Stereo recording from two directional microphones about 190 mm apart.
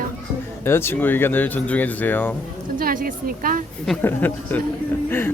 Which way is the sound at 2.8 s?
45° right (ahead or behind).